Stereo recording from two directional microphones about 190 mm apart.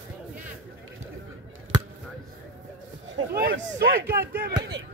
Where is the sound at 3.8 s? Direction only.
50° right (ahead or behind).